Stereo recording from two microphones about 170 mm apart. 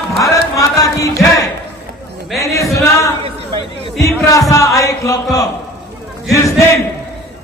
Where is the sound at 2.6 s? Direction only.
20° left (ahead or behind).